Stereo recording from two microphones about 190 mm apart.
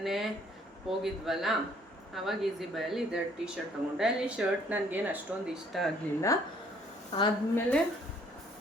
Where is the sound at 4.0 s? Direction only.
5° right (ahead or behind).